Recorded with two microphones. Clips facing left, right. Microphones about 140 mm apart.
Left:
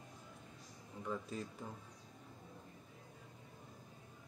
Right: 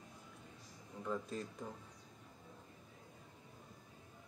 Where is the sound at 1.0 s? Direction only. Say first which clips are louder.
Right 1 dB; 5° left (ahead or behind).